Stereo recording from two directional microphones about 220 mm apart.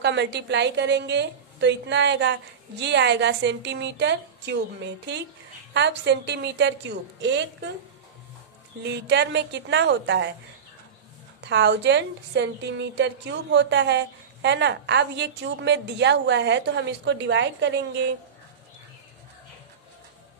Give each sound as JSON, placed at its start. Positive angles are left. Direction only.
{"t": 0.0, "sound": "a woman's voice", "side_deg": -50}
{"t": 8.8, "sound": "a woman's voice", "side_deg": -50}
{"t": 11.4, "sound": "a woman's voice", "side_deg": -50}